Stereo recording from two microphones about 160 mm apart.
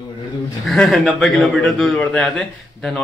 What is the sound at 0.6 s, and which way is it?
A man's voice, 5° left (ahead or behind).